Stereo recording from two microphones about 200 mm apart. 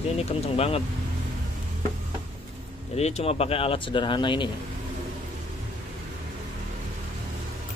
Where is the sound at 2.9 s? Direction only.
35° left (ahead or behind).